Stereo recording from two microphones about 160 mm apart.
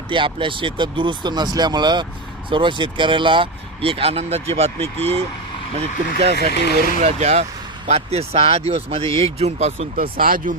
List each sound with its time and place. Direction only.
0.1 s speech: 30° right (ahead or behind)
6.3 s speech: 90° left
7.0 s speech: 40° right (ahead or behind)
10.0 s speech: 65° right (ahead or behind)